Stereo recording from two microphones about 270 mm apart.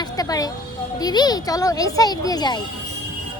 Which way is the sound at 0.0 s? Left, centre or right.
Centre.